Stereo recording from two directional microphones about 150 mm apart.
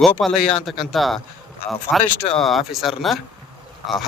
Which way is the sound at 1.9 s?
10° left (ahead or behind).